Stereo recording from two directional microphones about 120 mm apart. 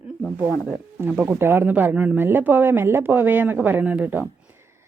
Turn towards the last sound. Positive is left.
turn(degrees=-15)  # may be behind; listen again after turning